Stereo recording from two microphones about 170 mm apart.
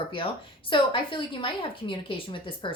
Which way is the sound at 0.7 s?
30° left (ahead or behind).